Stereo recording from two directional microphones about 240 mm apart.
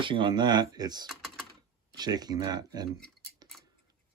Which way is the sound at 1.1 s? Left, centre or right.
Centre.